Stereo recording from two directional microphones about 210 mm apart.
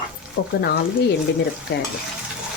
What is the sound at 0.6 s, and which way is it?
Speech, 50° left (ahead or behind).